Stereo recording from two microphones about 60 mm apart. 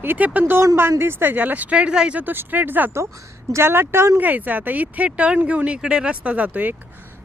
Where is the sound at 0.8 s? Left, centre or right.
Right; by 2.1 s centre.